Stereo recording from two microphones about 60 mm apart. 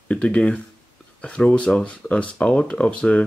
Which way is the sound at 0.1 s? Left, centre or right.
Centre.